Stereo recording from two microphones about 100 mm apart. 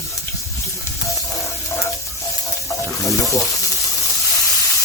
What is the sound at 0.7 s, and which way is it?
Sizzle, 30° left (ahead or behind).